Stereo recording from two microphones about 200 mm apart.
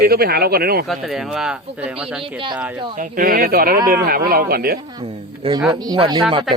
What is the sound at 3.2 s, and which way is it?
Speech, 45° right (ahead or behind).